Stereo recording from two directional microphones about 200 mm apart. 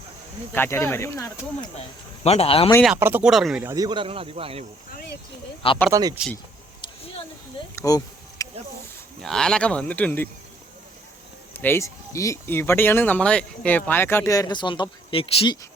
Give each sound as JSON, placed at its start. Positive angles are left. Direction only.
{"t": 0.5, "sound": "speech", "side_deg": 10}
{"t": 2.2, "sound": "speech", "side_deg": 30}
{"t": 2.8, "sound": "speech", "side_deg": -10}
{"t": 3.7, "sound": "speech", "side_deg": -20}
{"t": 5.9, "sound": "speech", "side_deg": -20}
{"t": 7.8, "sound": "a sound", "side_deg": 15}
{"t": 9.2, "sound": "speech", "side_deg": 5}
{"t": 11.5, "sound": "speech", "side_deg": 10}